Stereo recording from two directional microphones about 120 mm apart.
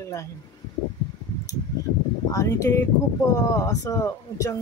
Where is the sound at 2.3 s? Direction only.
30° left (ahead or behind).